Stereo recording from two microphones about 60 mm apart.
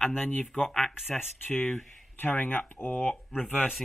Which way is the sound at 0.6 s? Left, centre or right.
Centre.